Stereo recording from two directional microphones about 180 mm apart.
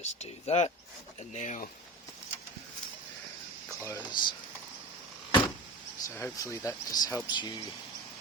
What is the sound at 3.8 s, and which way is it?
Speech, 15° left (ahead or behind).